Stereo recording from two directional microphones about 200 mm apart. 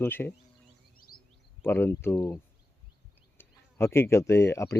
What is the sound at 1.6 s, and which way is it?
Speech, 10° left (ahead or behind).